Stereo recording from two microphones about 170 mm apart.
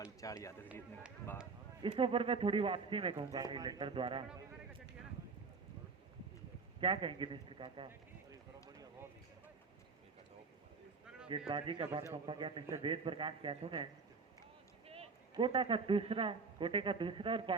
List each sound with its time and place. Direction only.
0.2 s speech: 20° left (ahead or behind)
1.9 s a man's voice: 30° right (ahead or behind)
6.7 s a man's voice: 30° right (ahead or behind)
11.3 s a man's voice: 30° right (ahead or behind)
14.8 s a man's voice: 35° right (ahead or behind)